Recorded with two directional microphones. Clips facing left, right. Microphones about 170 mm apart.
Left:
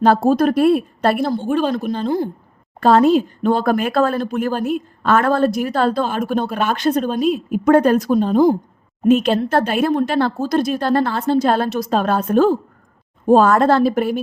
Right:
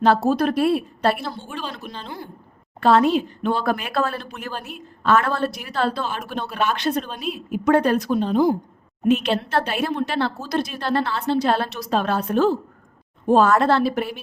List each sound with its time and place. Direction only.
0.0 s speech: 45° left (ahead or behind)